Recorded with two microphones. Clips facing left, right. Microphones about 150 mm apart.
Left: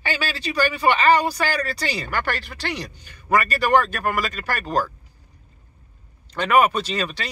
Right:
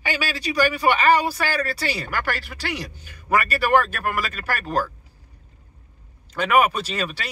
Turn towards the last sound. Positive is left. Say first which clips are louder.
# left 1 dB
turn(degrees=-5)  # may be behind; listen again after turning